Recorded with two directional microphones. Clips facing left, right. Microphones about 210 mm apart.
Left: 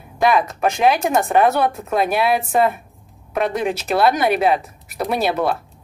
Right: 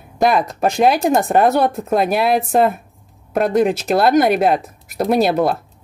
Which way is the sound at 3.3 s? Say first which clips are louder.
Right 5 dB; 45° right (ahead or behind).